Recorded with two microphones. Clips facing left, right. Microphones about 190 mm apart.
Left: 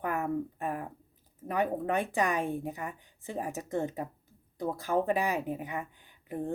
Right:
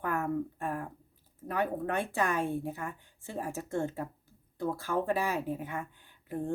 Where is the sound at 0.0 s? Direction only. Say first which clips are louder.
Even; 15° left (ahead or behind).